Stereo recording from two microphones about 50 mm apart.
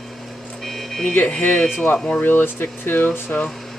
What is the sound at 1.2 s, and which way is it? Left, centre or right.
Speech, left.